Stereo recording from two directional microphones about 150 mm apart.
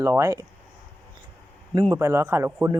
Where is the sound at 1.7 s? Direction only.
25° right (ahead or behind).